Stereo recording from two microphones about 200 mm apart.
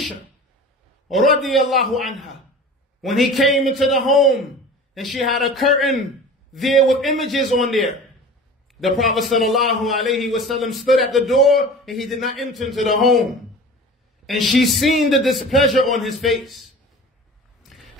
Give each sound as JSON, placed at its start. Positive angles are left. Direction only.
{"t": 1.4, "sound": "a man's voice", "side_deg": 0}
{"t": 14.2, "sound": "a man's voice", "side_deg": 0}
{"t": 17.6, "sound": "a sound", "side_deg": 0}